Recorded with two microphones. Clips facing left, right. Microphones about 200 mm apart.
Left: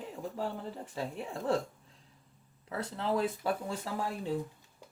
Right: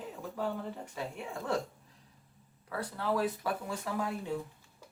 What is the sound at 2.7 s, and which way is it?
Speech, 25° left (ahead or behind).